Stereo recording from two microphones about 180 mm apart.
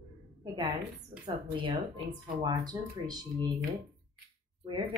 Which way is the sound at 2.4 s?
20° right (ahead or behind).